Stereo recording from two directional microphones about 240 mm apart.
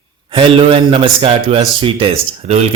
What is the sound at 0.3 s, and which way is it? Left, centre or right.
A man's voice, right.